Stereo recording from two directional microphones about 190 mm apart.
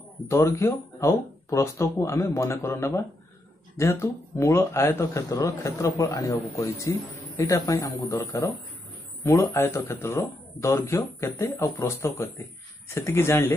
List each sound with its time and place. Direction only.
0.3 s speech: 15° left (ahead or behind)